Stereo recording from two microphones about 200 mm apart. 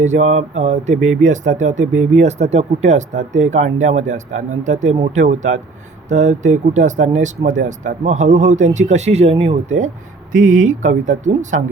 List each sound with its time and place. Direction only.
0.0 s speech: 35° right (ahead or behind)
0.9 s speech: centre (ahead or behind)
1.2 s speech: 35° right (ahead or behind)